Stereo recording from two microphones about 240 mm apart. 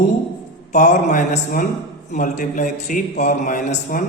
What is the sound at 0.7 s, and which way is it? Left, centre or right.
A man's voice, left.